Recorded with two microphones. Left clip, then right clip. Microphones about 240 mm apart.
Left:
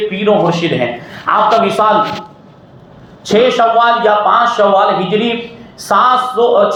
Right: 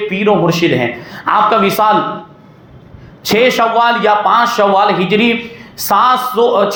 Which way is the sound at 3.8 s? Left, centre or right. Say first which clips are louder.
Left 1 dB; right.